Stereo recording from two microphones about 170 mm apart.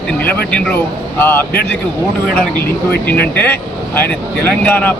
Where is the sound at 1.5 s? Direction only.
65° left (ahead or behind).